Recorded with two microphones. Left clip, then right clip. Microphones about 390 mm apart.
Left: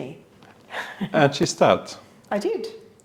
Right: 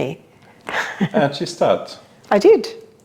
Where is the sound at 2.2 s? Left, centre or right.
Right.